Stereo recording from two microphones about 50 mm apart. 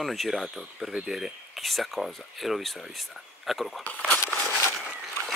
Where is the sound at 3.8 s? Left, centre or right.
Left.